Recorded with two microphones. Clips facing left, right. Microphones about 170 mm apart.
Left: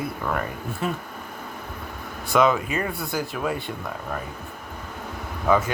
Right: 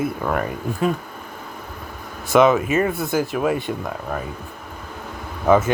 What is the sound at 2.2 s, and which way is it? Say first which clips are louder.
Speech: right 5 dB; 20° right (ahead or behind).